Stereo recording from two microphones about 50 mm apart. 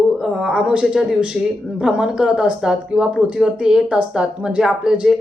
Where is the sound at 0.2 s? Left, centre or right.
Centre.